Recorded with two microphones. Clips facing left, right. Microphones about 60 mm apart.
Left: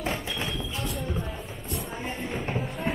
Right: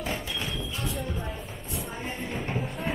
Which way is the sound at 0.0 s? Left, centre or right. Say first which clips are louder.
Left 2 dB; left.